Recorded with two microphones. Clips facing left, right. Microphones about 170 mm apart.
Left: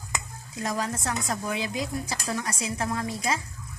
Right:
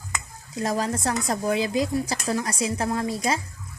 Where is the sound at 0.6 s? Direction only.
35° right (ahead or behind).